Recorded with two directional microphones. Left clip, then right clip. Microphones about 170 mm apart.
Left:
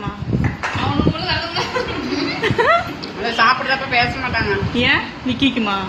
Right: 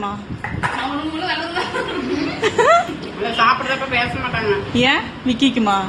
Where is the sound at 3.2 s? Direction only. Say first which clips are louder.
Left 1 dB; 25° left (ahead or behind).